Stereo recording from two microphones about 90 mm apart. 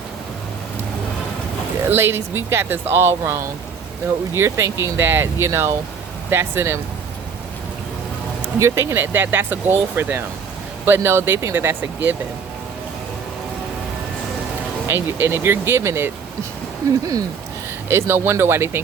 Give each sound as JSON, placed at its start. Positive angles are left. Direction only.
{"t": 1.9, "sound": "speech", "side_deg": -30}
{"t": 8.5, "sound": "speech", "side_deg": -30}
{"t": 14.8, "sound": "speech", "side_deg": -25}
{"t": 17.8, "sound": "speech", "side_deg": -30}